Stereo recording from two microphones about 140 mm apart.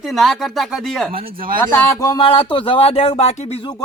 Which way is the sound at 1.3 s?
90° right.